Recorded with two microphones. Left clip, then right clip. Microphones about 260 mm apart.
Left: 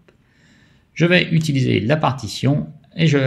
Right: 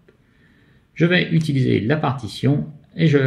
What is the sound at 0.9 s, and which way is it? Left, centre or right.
Speech, left.